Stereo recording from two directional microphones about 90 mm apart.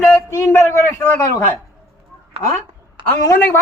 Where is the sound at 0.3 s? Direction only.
30° left (ahead or behind).